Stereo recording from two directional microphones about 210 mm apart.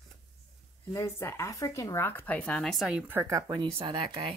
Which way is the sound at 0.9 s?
15° left (ahead or behind).